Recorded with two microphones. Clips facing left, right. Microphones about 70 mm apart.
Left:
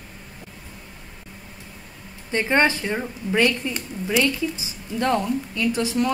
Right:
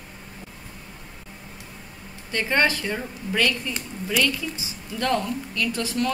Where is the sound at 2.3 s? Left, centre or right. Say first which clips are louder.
Left 3 dB; left.